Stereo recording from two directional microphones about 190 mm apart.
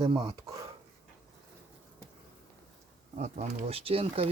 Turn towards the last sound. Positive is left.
turn(degrees=-30)  # may be behind; listen again after turning